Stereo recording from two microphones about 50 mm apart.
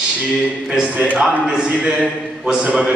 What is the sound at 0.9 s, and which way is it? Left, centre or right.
Speech, right.